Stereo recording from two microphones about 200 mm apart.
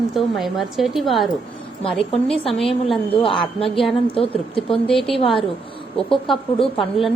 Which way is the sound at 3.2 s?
25° left (ahead or behind).